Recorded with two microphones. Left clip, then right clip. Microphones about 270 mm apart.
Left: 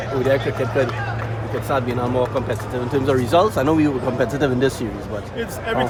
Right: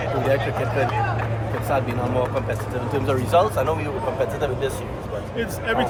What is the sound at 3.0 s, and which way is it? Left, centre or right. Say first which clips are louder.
Speech: left 2 dB; left.